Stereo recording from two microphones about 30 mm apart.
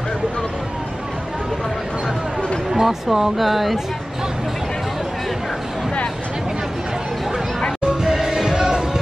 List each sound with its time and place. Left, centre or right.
2.7 s speech: centre
7.8 s music: right